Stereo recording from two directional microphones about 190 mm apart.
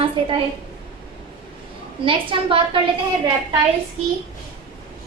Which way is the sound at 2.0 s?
25° right (ahead or behind).